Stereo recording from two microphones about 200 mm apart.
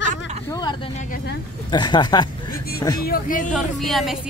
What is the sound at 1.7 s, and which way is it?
Speech, 20° left (ahead or behind).